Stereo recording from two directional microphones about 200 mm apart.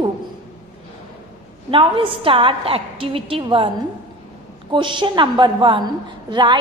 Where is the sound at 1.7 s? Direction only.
25° right (ahead or behind).